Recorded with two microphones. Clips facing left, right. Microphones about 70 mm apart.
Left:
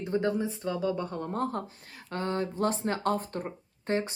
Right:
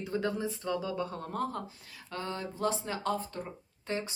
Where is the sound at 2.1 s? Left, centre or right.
Left.